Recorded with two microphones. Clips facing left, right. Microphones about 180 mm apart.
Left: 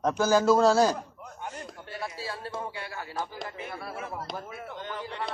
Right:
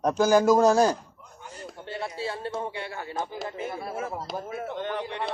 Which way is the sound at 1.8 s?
25° right (ahead or behind).